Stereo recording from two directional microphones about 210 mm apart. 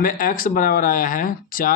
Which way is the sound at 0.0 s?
40° left (ahead or behind).